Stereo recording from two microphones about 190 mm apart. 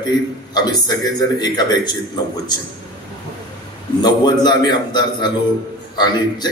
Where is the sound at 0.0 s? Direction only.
20° left (ahead or behind).